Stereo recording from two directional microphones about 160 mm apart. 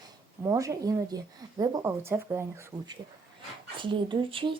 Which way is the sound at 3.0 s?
35° right (ahead or behind).